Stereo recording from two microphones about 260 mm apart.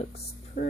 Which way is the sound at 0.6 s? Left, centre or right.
Left.